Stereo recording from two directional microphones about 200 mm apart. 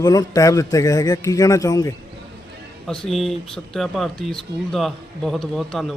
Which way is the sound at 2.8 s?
Centre (ahead or behind).